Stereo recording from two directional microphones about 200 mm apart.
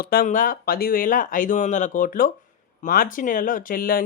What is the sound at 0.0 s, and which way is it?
Speech, 45° left (ahead or behind).